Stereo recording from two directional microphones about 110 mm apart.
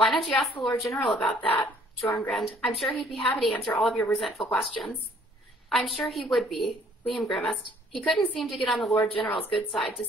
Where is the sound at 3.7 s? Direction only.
15° left (ahead or behind).